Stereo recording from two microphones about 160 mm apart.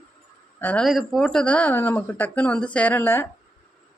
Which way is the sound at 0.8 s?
Centre (ahead or behind).